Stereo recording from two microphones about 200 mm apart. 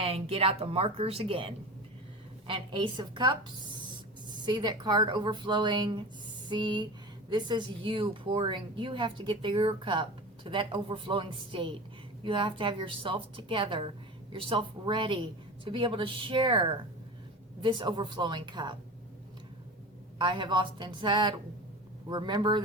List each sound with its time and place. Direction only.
0.0 s speech: 30° right (ahead or behind)
20.1 s speech: 25° right (ahead or behind)